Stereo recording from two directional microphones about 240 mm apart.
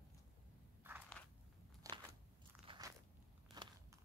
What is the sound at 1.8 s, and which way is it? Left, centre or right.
Crunch, centre.